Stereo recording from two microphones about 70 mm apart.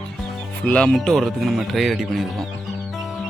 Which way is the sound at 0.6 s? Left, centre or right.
Centre.